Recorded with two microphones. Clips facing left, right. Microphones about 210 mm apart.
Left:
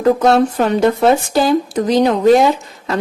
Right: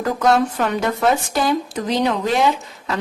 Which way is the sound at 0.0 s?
30° left (ahead or behind).